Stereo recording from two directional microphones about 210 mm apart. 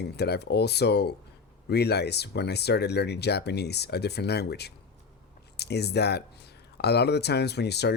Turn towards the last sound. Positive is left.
turn(degrees=50)  # may be behind; listen again after turning